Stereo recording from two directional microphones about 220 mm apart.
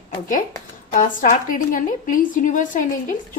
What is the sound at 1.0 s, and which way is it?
A woman's voice, 35° left (ahead or behind).